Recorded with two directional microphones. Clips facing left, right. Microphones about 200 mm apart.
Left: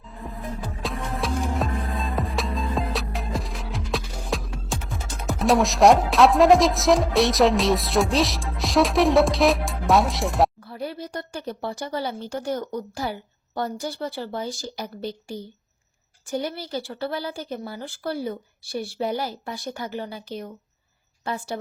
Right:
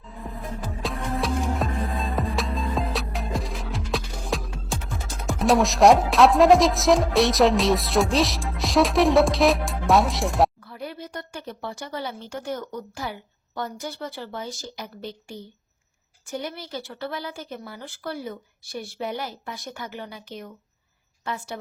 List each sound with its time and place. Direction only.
0.1 s music: centre (ahead or behind)
10.7 s speech: 35° left (ahead or behind)